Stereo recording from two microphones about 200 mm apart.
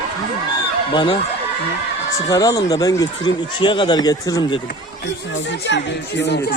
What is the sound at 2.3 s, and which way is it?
Speech, 20° left (ahead or behind).